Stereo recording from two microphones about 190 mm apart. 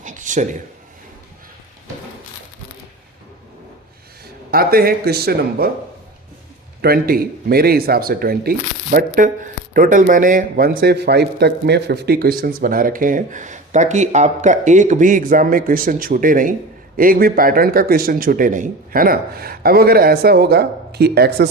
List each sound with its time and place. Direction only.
0.0 s a sound: 40° right (ahead or behind)
4.5 s speech: 50° right (ahead or behind)
6.8 s speech: 50° right (ahead or behind)